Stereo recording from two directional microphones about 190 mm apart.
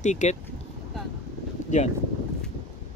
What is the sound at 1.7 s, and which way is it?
Speech, 40° left (ahead or behind).